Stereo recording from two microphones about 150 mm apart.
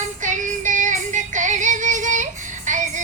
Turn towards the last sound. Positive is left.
turn(degrees=-55)  # may be behind; listen again after turning